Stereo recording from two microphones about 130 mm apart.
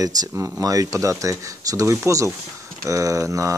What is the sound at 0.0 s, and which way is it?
Speech, 25° right (ahead or behind).